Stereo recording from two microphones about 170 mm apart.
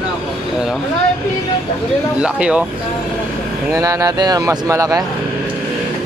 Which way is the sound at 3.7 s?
20° right (ahead or behind).